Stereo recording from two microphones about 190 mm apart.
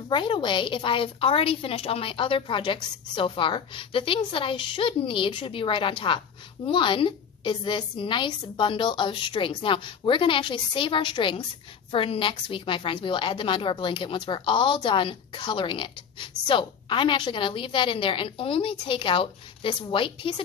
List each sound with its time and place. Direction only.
0.1 s a woman's voice: 25° left (ahead or behind)